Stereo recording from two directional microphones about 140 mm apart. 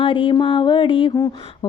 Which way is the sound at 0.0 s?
35° left (ahead or behind).